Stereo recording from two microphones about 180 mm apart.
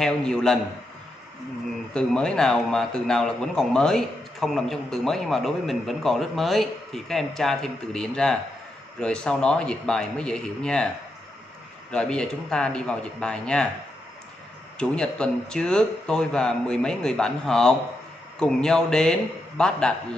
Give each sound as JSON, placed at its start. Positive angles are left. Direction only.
{"t": 0.0, "sound": "a man's voice", "side_deg": 5}
{"t": 2.0, "sound": "a man's voice", "side_deg": 5}
{"t": 11.9, "sound": "a man's voice", "side_deg": 5}
{"t": 14.8, "sound": "a man's voice", "side_deg": 5}